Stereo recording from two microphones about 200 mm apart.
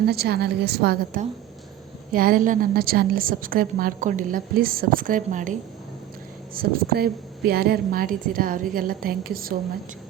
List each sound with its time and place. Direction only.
0.0 s a woman's voice: 50° right (ahead or behind)